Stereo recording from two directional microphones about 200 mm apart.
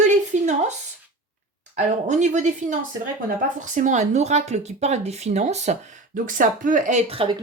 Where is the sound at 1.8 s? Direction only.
35° right (ahead or behind).